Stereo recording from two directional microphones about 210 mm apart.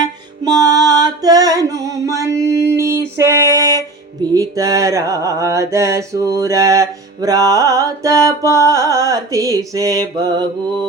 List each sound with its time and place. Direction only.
0.4 s music: 20° right (ahead or behind)
4.4 s mantra: 15° right (ahead or behind)